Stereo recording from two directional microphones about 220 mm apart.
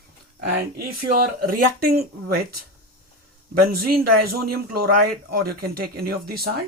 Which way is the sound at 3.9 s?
45° right (ahead or behind).